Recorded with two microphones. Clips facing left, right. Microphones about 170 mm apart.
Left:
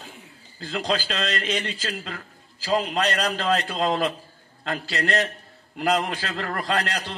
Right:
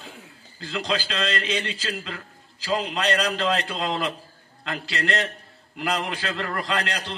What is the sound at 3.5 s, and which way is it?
Speech, 45° left (ahead or behind).